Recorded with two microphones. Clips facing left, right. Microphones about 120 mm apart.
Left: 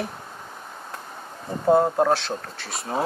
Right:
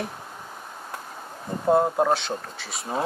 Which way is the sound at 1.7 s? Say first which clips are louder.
Left 2 dB; centre (ahead or behind).